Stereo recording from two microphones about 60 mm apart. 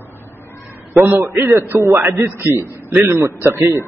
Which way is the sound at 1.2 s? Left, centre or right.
Right.